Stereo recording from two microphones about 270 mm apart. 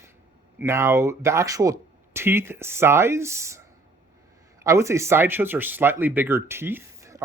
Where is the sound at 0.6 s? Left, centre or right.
Centre.